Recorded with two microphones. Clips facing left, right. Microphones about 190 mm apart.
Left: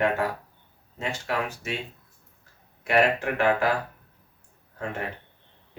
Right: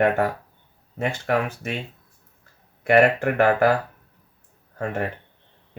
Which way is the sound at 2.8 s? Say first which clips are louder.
Right 5 dB; 60° right (ahead or behind).